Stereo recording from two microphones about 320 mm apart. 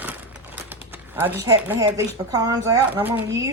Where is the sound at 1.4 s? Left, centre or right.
Centre.